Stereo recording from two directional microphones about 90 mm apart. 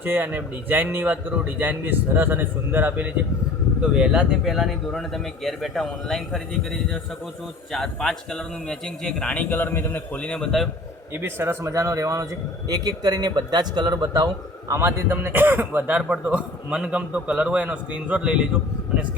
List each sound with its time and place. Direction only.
0.0 s speech: 25° right (ahead or behind)
3.8 s speech: 10° right (ahead or behind)
11.1 s a man's voice: 25° right (ahead or behind); by 14.3 s 45° right (ahead or behind)
14.7 s speech: 30° right (ahead or behind); by 18.4 s 10° right (ahead or behind)